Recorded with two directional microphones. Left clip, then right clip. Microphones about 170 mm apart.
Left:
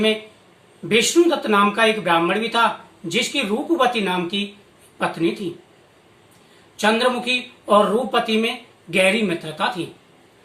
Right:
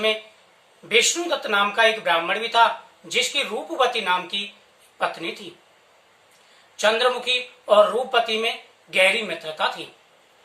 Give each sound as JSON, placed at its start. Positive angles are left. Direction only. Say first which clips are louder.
{"t": 0.9, "sound": "speech", "louder": "left 4 dB", "side_deg": -10}
{"t": 6.7, "sound": "speech", "louder": "left 1 dB", "side_deg": -10}